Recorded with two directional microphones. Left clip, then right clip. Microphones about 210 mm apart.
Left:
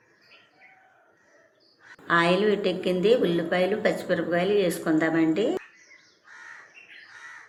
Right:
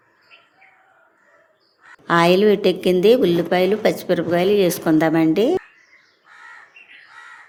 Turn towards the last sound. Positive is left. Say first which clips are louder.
# right 7 dB
turn(degrees=-50)  # may be behind; listen again after turning